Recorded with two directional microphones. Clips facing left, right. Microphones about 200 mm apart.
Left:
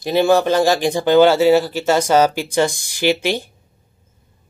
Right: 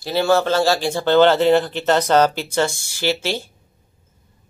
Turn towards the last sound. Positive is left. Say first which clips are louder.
# left 4 dB
turn(degrees=15)  # may be behind; listen again after turning